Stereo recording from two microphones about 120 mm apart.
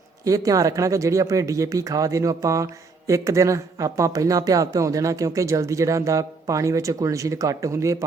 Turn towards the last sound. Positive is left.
turn(degrees=-25)  # may be behind; listen again after turning